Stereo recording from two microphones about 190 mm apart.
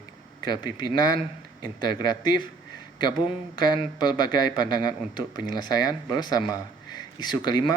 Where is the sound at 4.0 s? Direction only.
20° left (ahead or behind).